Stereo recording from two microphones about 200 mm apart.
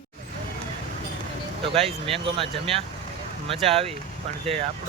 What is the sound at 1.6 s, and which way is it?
Speech, 30° right (ahead or behind).